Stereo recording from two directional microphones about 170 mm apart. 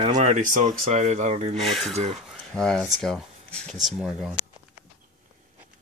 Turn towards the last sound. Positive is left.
turn(degrees=-5)  # may be behind; listen again after turning